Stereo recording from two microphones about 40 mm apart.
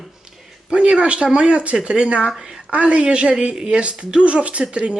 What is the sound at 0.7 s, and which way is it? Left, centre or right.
Speech, right.